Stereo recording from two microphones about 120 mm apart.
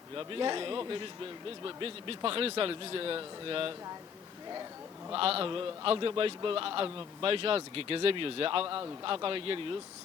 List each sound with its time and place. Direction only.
0.2 s a man's voice: 40° right (ahead or behind)
5.1 s a man's voice: 50° right (ahead or behind)